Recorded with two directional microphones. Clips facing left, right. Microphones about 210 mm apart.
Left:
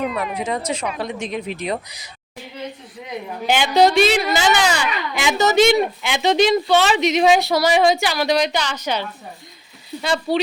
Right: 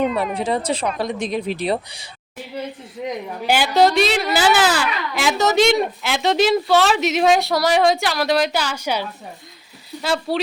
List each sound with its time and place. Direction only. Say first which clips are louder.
0.3 s speech: right 2 dB; 30° right (ahead or behind)
3.4 s a child's voice: left 1 dB; 5° right (ahead or behind)